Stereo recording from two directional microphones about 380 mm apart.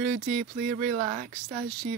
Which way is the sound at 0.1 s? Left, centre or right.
Centre.